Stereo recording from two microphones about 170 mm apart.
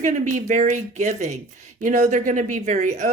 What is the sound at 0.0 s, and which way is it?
Speech, 50° right (ahead or behind).